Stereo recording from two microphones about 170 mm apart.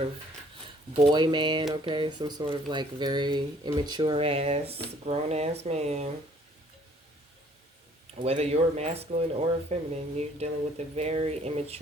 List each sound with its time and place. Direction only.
1.1 s speech: 25° right (ahead or behind)
8.2 s speech: 35° right (ahead or behind)